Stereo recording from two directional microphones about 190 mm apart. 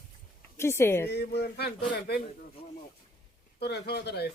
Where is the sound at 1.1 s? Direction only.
60° left (ahead or behind).